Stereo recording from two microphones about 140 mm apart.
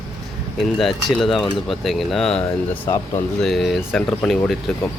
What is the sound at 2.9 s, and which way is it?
Speech, 20° left (ahead or behind).